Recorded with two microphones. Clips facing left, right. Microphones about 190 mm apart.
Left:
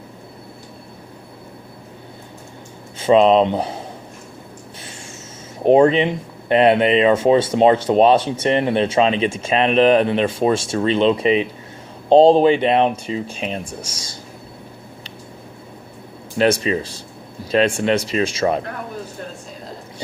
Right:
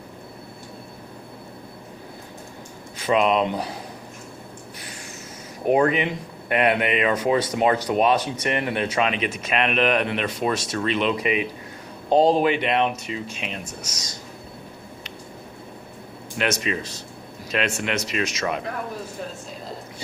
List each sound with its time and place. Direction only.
3.0 s speech: 30° left (ahead or behind)
5.6 s speech: 25° left (ahead or behind)
16.4 s speech: 35° left (ahead or behind)